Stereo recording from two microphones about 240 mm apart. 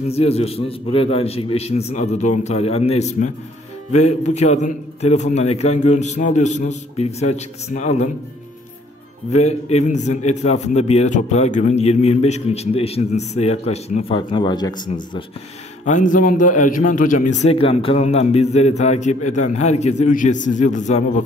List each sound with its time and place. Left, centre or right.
0.1 s a man's voice: left
9.3 s a man's voice: left
15.8 s a man's voice: left